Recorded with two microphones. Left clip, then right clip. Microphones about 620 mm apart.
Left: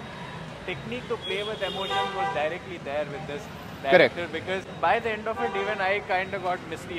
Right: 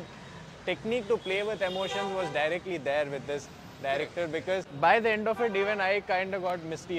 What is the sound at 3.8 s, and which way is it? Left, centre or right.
A man's voice, right.